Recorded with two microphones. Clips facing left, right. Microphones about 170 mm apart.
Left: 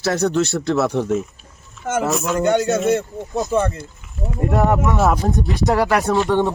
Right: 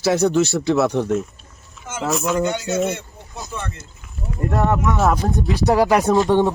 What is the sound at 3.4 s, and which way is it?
Speech, 40° left (ahead or behind).